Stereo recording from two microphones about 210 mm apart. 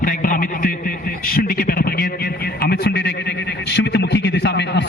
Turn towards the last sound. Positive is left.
turn(degrees=55)  # may be behind; listen again after turning